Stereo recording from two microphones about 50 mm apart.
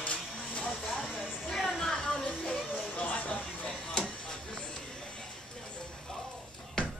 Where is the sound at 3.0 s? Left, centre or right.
Left.